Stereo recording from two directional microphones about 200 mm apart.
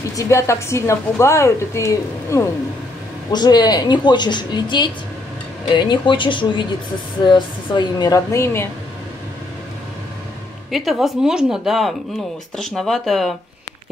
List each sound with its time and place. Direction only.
0.1 s a woman's voice: 15° left (ahead or behind)
10.7 s speech: centre (ahead or behind)